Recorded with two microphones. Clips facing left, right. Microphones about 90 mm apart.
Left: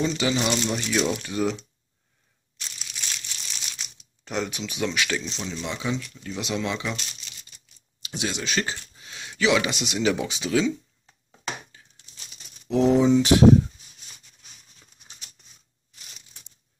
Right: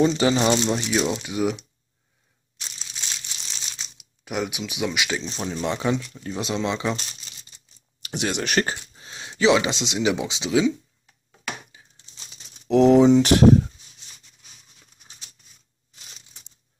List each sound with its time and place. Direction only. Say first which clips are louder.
0.0 s speech: right 5 dB; 35° right (ahead or behind); by 1.7 s 10° right (ahead or behind)
2.8 s crumpling: even; 30° right (ahead or behind)
4.2 s speech: right 1 dB; 10° right (ahead or behind)
5.2 s speech: right 5 dB; 40° right (ahead or behind)
5.9 s speech: right 3 dB; 25° right (ahead or behind)
8.0 s speech: right 4 dB; 60° right (ahead or behind)
8.9 s speech: right 2 dB; 30° right (ahead or behind)
11.7 s a sound: right 1 dB; 15° right (ahead or behind)
12.6 s speech: right 5 dB; 70° right (ahead or behind)